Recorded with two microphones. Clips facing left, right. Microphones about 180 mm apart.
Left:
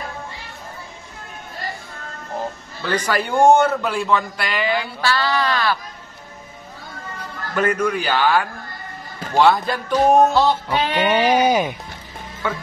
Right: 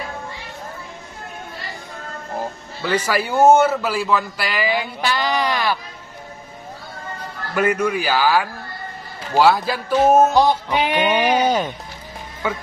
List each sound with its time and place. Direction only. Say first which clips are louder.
2.8 s a man's voice: right 1 dB; 10° right (ahead or behind)
5.0 s a man's voice: left 1 dB; 15° right (ahead or behind)
7.5 s a man's voice: right 1 dB; 10° right (ahead or behind)
10.3 s a man's voice: right 1 dB; 15° right (ahead or behind)
11.1 s a sound: left 4 dB; 10° left (ahead or behind)